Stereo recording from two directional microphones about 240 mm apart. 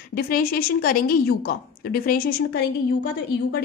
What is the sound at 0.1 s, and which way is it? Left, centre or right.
A woman's voice, left.